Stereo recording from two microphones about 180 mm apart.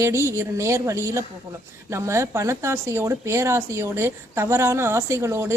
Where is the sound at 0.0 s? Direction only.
15° right (ahead or behind).